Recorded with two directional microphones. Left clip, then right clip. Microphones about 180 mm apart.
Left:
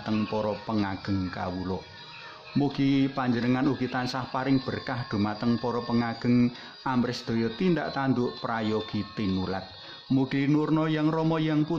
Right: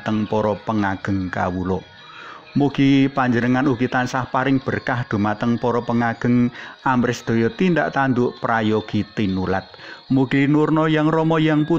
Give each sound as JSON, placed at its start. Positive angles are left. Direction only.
{"t": 0.0, "sound": "speech", "side_deg": -30}